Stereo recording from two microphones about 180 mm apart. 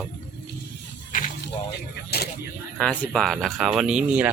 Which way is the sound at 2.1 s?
65° left (ahead or behind).